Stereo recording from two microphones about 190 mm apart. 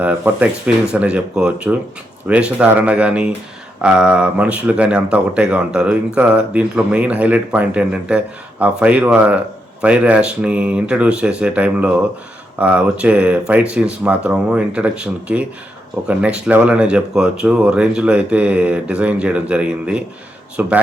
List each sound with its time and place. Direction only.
0.0 s speech: 5° right (ahead or behind)